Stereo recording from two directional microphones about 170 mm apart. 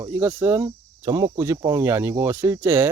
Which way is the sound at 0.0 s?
15° right (ahead or behind).